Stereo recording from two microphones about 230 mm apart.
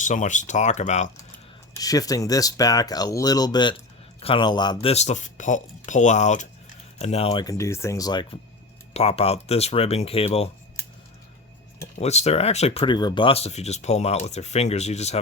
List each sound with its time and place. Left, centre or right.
0.0 s speech: left
1.8 s speech: centre
11.9 s speech: left